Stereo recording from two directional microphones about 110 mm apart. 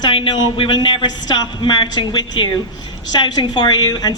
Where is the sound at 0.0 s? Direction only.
50° left (ahead or behind).